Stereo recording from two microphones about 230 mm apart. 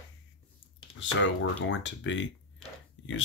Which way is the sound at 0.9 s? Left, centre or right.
Left.